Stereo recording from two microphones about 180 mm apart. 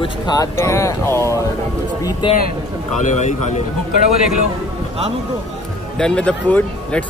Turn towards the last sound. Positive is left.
turn(degrees=10)  # may be behind; listen again after turning